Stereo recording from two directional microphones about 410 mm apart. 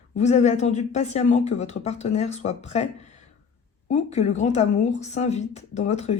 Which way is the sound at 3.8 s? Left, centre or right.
Centre.